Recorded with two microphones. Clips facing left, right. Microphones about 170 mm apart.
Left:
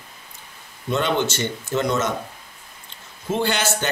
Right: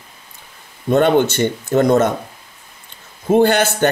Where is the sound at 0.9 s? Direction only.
55° right (ahead or behind).